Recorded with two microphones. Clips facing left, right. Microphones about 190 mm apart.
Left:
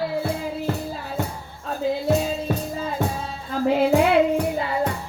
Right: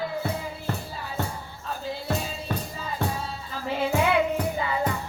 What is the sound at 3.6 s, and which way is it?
Music, 40° left (ahead or behind).